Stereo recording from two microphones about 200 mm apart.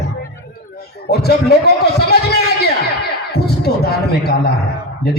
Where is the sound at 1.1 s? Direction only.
55° left (ahead or behind).